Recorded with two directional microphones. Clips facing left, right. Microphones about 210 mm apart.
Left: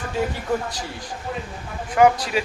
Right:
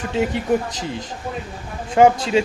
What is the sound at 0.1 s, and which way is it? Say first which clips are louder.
Speech: right 5 dB; 20° right (ahead or behind).